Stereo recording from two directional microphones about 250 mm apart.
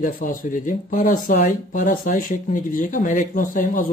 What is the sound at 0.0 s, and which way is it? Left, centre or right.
Speech, left.